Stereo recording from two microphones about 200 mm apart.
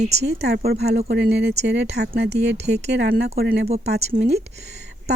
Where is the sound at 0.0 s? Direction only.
35° right (ahead or behind).